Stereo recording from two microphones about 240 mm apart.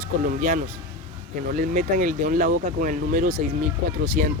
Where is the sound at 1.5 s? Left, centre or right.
Right.